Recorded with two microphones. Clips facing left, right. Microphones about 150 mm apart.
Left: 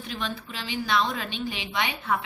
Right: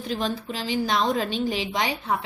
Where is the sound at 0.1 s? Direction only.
40° right (ahead or behind).